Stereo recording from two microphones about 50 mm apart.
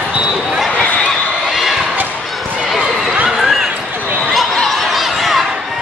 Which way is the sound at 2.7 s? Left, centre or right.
Right.